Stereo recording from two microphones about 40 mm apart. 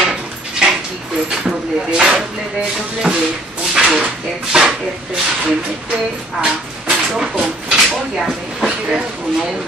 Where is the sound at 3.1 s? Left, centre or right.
Right.